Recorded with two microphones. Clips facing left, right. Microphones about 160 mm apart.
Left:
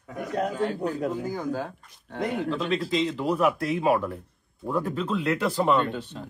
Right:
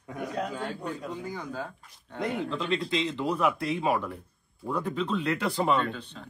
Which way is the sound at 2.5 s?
Centre (ahead or behind).